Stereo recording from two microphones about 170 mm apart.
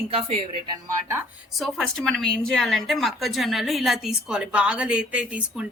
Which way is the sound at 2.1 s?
Centre (ahead or behind).